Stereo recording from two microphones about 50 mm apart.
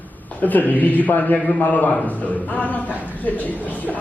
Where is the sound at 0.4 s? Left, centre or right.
Left.